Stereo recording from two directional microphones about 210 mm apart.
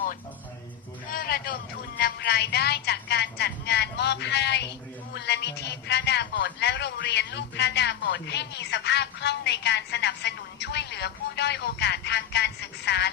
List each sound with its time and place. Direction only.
1.1 s vehicle: 45° left (ahead or behind)
2.0 s a man's voice: 50° left (ahead or behind)